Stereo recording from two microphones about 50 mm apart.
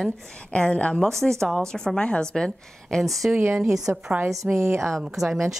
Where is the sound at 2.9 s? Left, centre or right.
Centre.